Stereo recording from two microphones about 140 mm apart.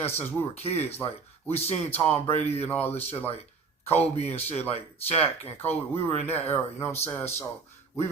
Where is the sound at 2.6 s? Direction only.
15° left (ahead or behind).